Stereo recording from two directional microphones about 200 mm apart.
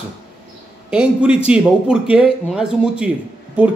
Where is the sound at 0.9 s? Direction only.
5° right (ahead or behind).